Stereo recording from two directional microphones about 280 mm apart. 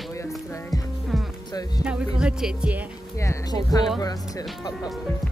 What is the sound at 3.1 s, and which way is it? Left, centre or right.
Speech, centre.